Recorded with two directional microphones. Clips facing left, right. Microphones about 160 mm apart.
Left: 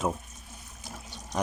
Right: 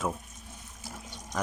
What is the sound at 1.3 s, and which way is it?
Speech, 20° left (ahead or behind).